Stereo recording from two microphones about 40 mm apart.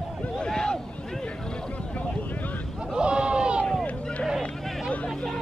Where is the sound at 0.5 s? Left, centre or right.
Centre.